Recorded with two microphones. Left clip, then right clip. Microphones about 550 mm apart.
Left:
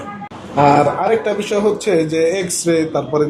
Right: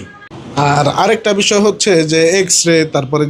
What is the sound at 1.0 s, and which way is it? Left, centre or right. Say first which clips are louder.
A man's voice: right 4 dB; right.